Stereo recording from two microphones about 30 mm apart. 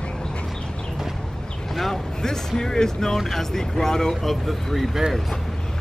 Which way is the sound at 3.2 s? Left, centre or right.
Centre.